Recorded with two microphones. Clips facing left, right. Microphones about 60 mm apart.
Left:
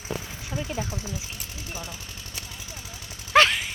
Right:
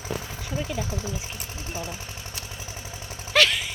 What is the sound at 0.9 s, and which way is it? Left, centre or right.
Speech, right.